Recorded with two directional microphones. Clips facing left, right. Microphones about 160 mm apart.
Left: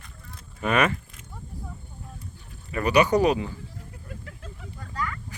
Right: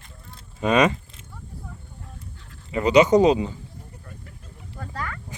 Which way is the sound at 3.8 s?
90° left.